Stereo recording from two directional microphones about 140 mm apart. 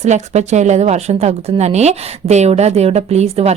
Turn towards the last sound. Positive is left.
turn(degrees=-45)  # may be behind; listen again after turning